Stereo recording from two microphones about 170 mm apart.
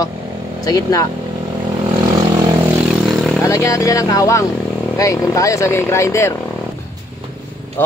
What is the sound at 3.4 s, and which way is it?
Speech, 15° left (ahead or behind).